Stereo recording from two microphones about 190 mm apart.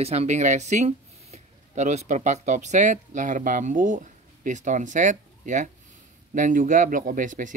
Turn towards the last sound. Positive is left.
turn(degrees=-45)  # may be behind; listen again after turning